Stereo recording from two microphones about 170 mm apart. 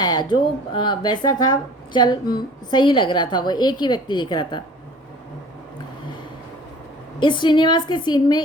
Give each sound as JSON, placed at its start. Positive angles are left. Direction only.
{"t": 0.0, "sound": "speech", "side_deg": 25}
{"t": 7.2, "sound": "speech", "side_deg": 25}